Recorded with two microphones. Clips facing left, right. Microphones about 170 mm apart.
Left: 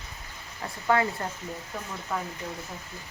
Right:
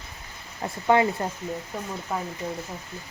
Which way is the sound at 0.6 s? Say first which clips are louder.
Right 4 dB; 20° right (ahead or behind).